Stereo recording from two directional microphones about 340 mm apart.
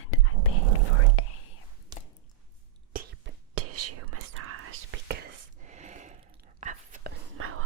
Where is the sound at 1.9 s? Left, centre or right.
Centre.